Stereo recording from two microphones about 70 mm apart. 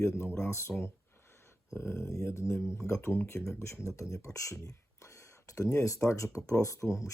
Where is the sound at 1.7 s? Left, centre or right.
Left.